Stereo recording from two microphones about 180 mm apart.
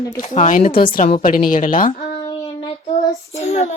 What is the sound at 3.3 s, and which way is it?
Speech, 40° left (ahead or behind).